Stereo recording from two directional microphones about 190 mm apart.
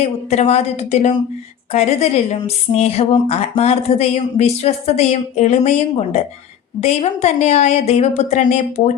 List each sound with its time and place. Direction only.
0.0 s speech: 35° left (ahead or behind)